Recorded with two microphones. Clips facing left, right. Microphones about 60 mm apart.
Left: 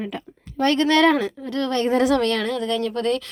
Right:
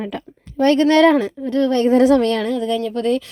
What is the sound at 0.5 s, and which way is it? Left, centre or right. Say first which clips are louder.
A woman's voice: right 5 dB; right.